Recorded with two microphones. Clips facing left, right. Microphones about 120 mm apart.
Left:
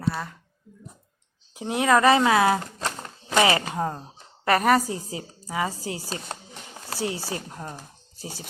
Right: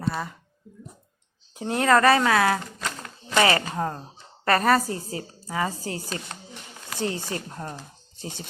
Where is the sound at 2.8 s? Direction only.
35° left (ahead or behind).